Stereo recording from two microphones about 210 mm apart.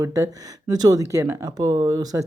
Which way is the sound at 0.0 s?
15° right (ahead or behind).